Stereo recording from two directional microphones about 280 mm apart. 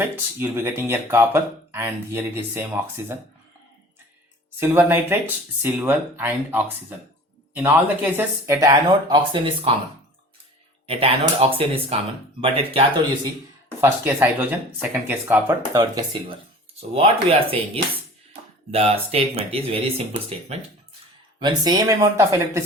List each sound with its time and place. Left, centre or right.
0.0 s speech: centre
4.6 s speech: centre
10.8 s speech: centre
13.8 s speech: centre
18.7 s speech: right
21.3 s speech: centre